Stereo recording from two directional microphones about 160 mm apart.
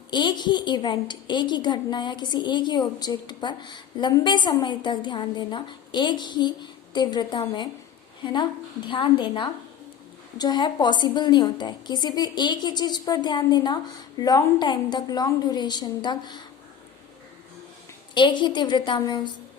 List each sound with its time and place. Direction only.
0.1 s a woman's voice: 30° left (ahead or behind)
18.1 s a woman's voice: 30° left (ahead or behind)